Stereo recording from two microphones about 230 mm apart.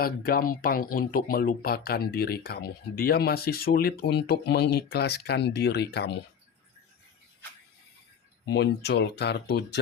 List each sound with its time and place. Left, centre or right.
0.0 s speech: left
8.4 s speech: left